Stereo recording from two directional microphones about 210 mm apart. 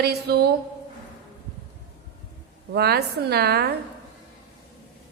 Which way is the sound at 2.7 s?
50° right (ahead or behind).